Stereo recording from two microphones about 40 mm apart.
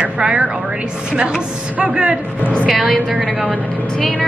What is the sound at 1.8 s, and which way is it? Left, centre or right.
Speech, right.